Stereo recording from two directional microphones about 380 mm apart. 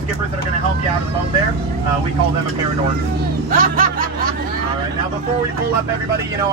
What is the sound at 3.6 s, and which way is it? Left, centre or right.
Music, right.